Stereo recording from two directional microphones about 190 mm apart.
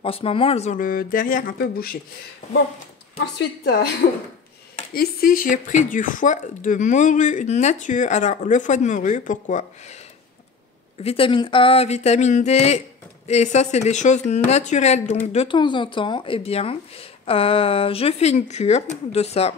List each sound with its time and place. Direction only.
0.0 s speech: 30° left (ahead or behind); by 2.0 s 50° left (ahead or behind)
3.3 s a woman's voice: 60° left (ahead or behind)
4.9 s speech: 50° left (ahead or behind)
11.0 s speech: 30° left (ahead or behind)